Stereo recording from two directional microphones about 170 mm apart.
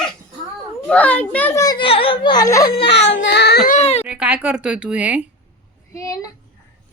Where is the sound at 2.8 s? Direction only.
85° left; by 3.8 s 65° left (ahead or behind).